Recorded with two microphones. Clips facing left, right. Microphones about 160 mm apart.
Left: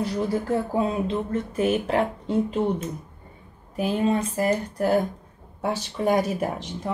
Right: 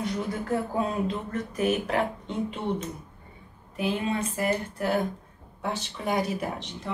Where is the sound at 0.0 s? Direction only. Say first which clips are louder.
Left 5 dB; 30° left (ahead or behind).